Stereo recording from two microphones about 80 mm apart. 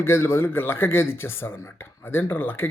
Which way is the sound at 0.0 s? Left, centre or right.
Left.